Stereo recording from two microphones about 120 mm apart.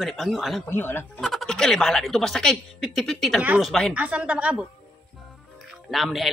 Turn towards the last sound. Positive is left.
turn(degrees=0)  # may be behind; listen again after turning